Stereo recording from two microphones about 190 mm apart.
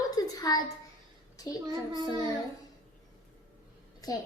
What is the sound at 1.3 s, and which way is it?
Speech, 20° left (ahead or behind).